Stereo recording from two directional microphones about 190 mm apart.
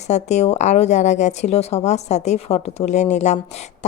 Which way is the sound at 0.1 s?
35° left (ahead or behind).